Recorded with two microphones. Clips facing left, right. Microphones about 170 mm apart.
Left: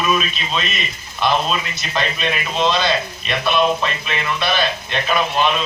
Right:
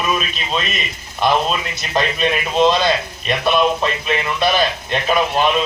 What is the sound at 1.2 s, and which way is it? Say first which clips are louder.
A man's voice: right 2 dB; 45° right (ahead or behind).